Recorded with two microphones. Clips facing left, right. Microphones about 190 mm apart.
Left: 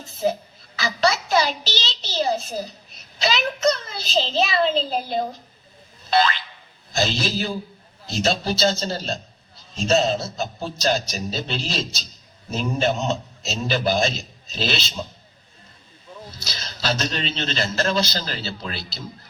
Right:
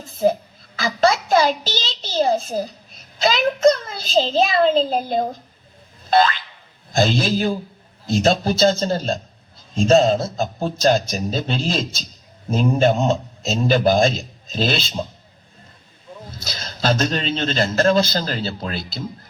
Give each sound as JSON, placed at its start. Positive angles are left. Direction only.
{"t": 0.2, "sound": "a man's voice", "side_deg": -50}
{"t": 0.8, "sound": "a sound", "side_deg": -50}
{"t": 3.2, "sound": "a man's voice", "side_deg": -50}
{"t": 6.1, "sound": "boing", "side_deg": -50}
{"t": 6.9, "sound": "a man's voice", "side_deg": -50}
{"t": 16.2, "sound": "a man's voice", "side_deg": -50}